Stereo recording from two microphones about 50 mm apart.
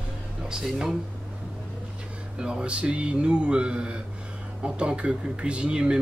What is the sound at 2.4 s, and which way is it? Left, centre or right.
Speech, centre.